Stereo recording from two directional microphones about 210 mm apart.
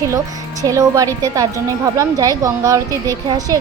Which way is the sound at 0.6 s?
15° right (ahead or behind).